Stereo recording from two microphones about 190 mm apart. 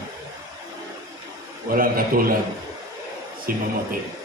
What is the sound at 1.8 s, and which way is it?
Speech, 50° right (ahead or behind).